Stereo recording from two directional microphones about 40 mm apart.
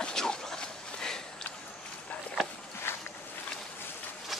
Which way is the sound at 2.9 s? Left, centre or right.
Left.